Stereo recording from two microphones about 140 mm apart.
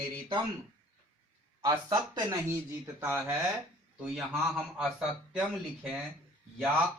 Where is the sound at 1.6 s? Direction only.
30° right (ahead or behind).